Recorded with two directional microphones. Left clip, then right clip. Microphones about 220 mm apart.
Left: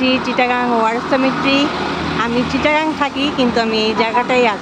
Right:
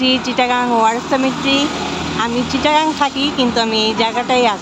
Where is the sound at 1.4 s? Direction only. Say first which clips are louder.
Left 1 dB; 45° right (ahead or behind).